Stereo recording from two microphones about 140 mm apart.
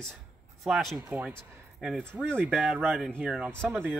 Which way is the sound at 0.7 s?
5° right (ahead or behind).